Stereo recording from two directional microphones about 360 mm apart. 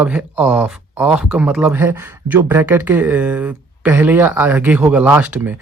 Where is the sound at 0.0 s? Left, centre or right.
Centre.